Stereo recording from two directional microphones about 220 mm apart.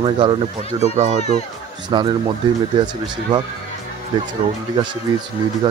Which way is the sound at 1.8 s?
20° right (ahead or behind).